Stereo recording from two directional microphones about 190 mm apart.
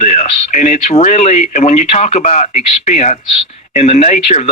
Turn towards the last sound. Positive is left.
turn(degrees=40)  # may be behind; listen again after turning